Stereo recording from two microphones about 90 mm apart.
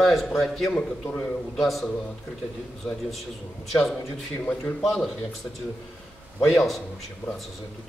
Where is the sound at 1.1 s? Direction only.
15° left (ahead or behind).